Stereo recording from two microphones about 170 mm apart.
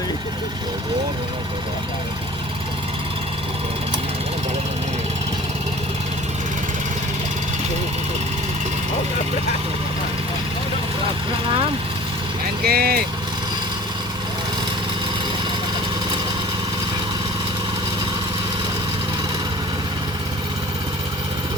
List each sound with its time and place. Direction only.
12.6 s speech: 65° right (ahead or behind)